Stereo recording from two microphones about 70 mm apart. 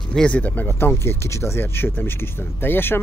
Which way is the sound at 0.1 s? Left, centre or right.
Centre.